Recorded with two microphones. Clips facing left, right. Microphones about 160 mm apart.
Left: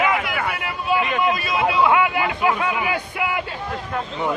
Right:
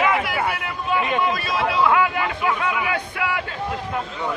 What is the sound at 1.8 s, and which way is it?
A man's voice, 10° left (ahead or behind).